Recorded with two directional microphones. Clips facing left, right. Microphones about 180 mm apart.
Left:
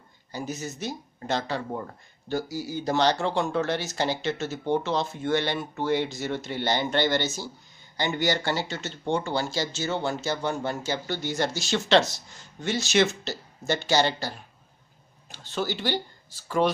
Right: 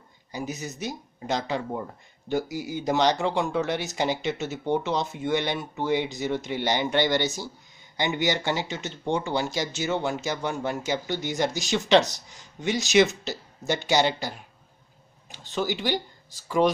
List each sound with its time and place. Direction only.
0.5 s speech: 15° right (ahead or behind)
15.3 s speech: 15° right (ahead or behind)